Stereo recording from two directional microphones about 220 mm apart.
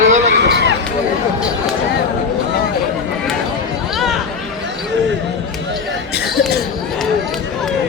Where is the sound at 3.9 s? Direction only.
Centre (ahead or behind).